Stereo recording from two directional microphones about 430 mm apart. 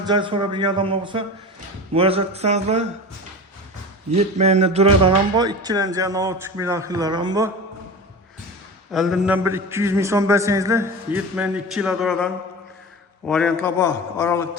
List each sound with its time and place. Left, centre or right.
0.1 s speech: centre
4.1 s speech: centre
8.9 s a sound: centre